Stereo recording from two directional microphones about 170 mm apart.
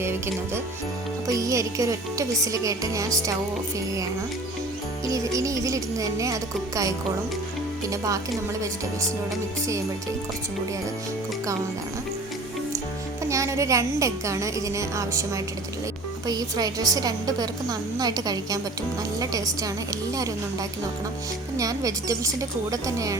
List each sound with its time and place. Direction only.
0.0 s a woman's voice: 15° right (ahead or behind)
5.0 s a woman's voice: 20° right (ahead or behind)
7.9 s a woman's voice: 20° right (ahead or behind)
13.2 s a woman's voice: 20° right (ahead or behind)